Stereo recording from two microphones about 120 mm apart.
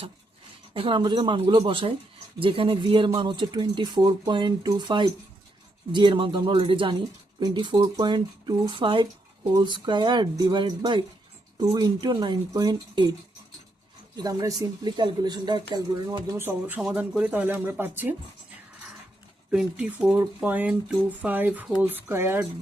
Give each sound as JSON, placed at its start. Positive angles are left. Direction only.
{"t": 0.7, "sound": "speech", "side_deg": -45}
{"t": 14.2, "sound": "speech", "side_deg": -30}
{"t": 16.4, "sound": "speech", "side_deg": -15}
{"t": 19.5, "sound": "speech", "side_deg": -10}